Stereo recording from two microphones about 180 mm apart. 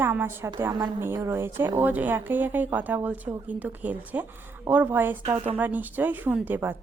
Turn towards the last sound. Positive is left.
turn(degrees=-10)  # may be behind; listen again after turning